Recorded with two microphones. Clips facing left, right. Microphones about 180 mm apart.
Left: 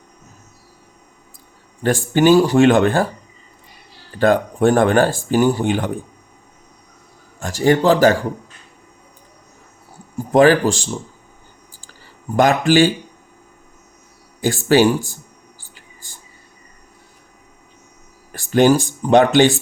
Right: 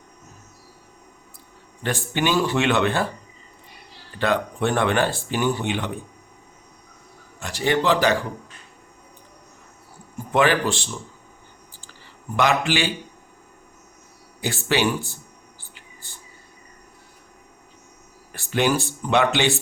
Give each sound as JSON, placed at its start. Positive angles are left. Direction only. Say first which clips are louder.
{"t": 1.8, "sound": "speech", "louder": "left 10 dB", "side_deg": 40}
{"t": 4.2, "sound": "speech", "louder": "left 8 dB", "side_deg": 45}
{"t": 7.3, "sound": "speech", "louder": "left 7 dB", "side_deg": 45}
{"t": 10.2, "sound": "speech", "louder": "left 8 dB", "side_deg": 40}
{"t": 12.4, "sound": "speech", "louder": "left 8 dB", "side_deg": 45}
{"t": 14.4, "sound": "speech", "louder": "left 8 dB", "side_deg": 40}
{"t": 18.3, "sound": "a sound", "louder": "left 8 dB", "side_deg": 40}
{"t": 19.0, "sound": "speech", "louder": "left 9 dB", "side_deg": 40}